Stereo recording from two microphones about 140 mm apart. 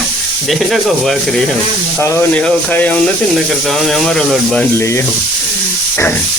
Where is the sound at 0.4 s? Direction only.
Centre (ahead or behind).